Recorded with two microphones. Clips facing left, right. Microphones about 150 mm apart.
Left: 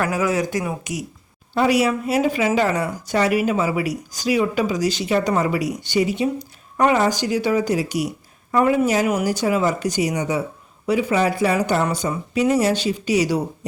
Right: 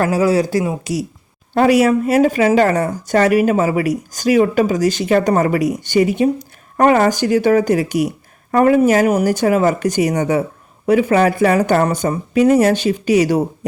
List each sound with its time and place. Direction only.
0.0 s speech: 35° right (ahead or behind)
1.5 s speech: 50° right (ahead or behind)